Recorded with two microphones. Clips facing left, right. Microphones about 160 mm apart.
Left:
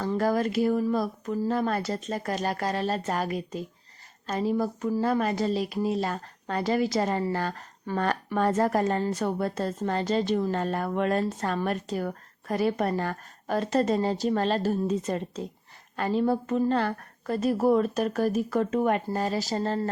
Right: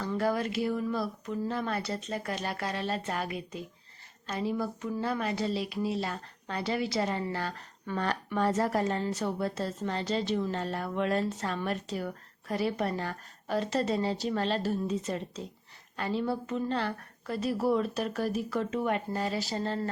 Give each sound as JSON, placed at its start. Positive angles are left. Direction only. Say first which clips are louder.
{"t": 0.0, "sound": "a woman's voice", "louder": "left 4 dB", "side_deg": 45}